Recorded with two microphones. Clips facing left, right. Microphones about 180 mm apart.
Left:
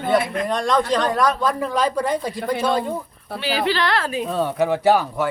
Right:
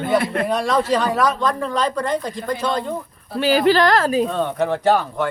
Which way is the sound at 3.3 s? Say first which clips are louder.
Right 7 dB; 45° right (ahead or behind).